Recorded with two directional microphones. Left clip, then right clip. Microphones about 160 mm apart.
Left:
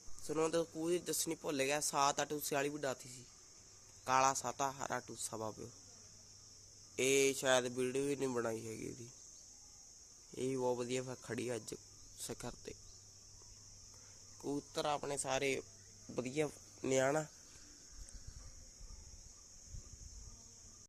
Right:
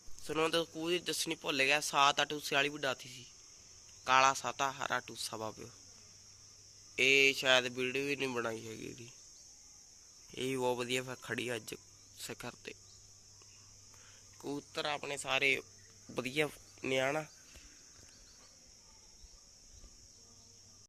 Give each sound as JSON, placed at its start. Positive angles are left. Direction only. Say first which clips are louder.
{"t": 0.3, "sound": "speech", "louder": "right 3 dB", "side_deg": 0}
{"t": 6.9, "sound": "speech", "louder": "right 6 dB", "side_deg": 20}
{"t": 10.3, "sound": "speech", "louder": "right 3 dB", "side_deg": 5}
{"t": 14.7, "sound": "speech", "louder": "right 1 dB", "side_deg": 25}
{"t": 16.1, "sound": "speech", "louder": "right 4 dB", "side_deg": 5}
{"t": 16.9, "sound": "speech", "louder": "right 1 dB", "side_deg": 20}